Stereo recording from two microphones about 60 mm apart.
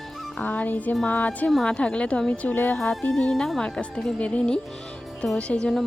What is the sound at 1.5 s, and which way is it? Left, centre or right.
Speech, centre.